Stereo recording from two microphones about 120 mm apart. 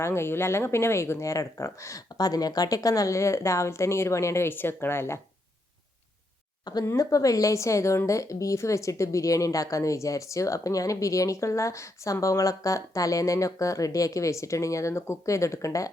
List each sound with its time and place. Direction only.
0.0 s speech: 20° left (ahead or behind)
6.8 s speech: 30° left (ahead or behind)